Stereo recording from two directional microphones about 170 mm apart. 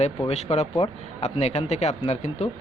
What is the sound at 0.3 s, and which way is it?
Speech, 40° left (ahead or behind).